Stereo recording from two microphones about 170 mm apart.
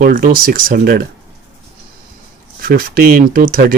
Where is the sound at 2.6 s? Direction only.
60° right (ahead or behind).